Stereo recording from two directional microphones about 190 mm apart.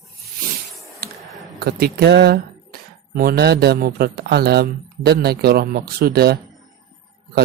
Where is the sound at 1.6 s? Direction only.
55° right (ahead or behind).